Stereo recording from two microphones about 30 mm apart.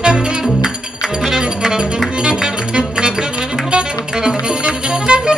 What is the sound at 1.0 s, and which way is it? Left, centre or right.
Music, centre.